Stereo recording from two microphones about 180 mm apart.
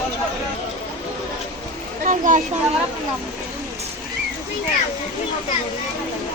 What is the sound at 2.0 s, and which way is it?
Speech, 45° right (ahead or behind).